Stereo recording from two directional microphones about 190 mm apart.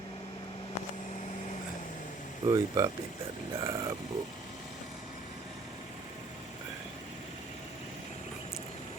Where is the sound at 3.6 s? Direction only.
20° right (ahead or behind).